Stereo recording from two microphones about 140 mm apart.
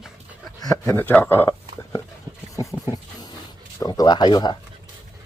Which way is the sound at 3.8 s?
30° left (ahead or behind).